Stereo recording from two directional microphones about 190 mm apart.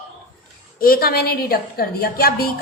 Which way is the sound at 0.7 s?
50° left (ahead or behind).